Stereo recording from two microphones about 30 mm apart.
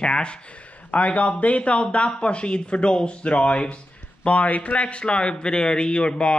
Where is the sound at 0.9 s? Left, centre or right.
Left.